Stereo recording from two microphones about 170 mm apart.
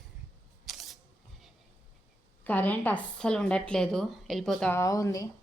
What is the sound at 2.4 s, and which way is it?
Speech, 10° left (ahead or behind).